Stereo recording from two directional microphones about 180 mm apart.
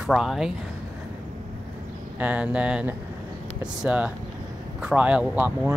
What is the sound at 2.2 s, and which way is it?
Speech, 5° right (ahead or behind).